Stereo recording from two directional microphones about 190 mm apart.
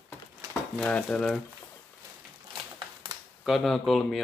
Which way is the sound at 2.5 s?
25° right (ahead or behind).